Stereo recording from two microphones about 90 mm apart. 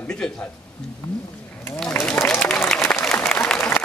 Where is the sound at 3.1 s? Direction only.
15° left (ahead or behind).